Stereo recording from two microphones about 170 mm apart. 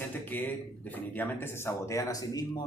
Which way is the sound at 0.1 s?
10° left (ahead or behind).